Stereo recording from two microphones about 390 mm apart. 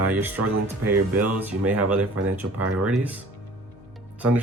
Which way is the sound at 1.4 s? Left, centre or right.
Centre.